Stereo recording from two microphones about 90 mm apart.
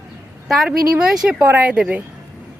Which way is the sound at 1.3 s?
20° right (ahead or behind).